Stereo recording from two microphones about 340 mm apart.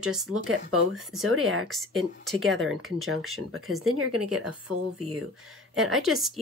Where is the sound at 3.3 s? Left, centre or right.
Right.